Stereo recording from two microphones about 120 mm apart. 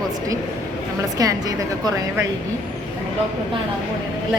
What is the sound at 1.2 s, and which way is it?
Speech, 30° right (ahead or behind).